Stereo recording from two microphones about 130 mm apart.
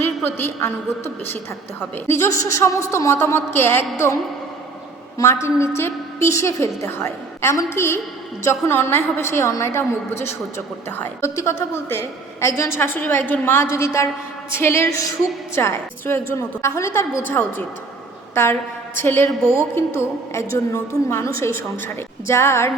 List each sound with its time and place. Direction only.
0.0 s a woman's voice: 15° left (ahead or behind)
10.8 s a woman's voice: 15° left (ahead or behind)
18.9 s a woman's voice: 15° left (ahead or behind)